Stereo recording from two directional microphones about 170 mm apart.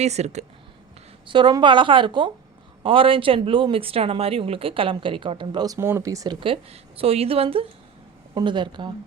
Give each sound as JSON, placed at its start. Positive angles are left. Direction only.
{"t": 0.0, "sound": "speech", "side_deg": -40}
{"t": 1.3, "sound": "a woman's voice", "side_deg": -25}
{"t": 6.4, "sound": "a woman's voice", "side_deg": -35}